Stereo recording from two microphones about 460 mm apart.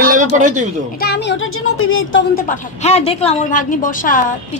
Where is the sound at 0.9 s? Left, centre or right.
Left.